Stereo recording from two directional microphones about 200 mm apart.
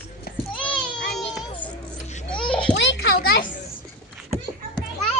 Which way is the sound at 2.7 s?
65° left (ahead or behind).